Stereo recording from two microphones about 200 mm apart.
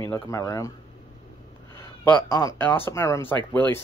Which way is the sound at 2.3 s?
15° left (ahead or behind).